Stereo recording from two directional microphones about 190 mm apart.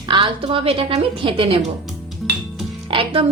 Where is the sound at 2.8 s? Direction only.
30° right (ahead or behind).